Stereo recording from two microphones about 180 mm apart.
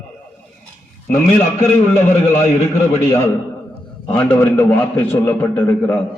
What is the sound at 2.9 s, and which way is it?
A man's voice, 15° left (ahead or behind).